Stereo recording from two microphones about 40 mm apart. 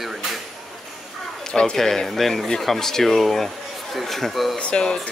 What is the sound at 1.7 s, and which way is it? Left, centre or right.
Speech, centre.